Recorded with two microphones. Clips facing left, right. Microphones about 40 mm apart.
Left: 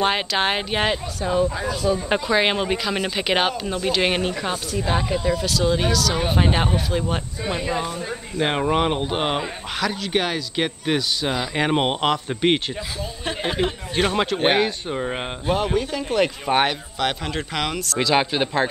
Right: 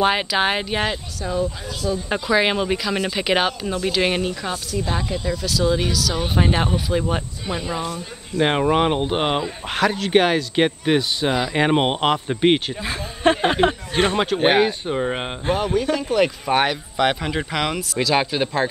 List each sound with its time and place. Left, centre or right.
0.0 s a woman's voice: centre; by 2.2 s left
2.2 s a woman's voice: centre
5.5 s speech: centre
8.4 s speech: centre
9.8 s speech: right
10.9 s speech: centre
13.2 s speech: right
14.1 s speech: centre
15.5 s speech: centre
17.0 s speech: centre
17.9 s speech: centre